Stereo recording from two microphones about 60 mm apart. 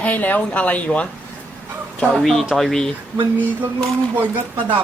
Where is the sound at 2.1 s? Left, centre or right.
Centre.